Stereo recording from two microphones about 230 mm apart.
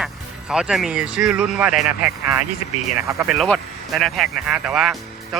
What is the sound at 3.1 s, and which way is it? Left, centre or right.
Speech, centre.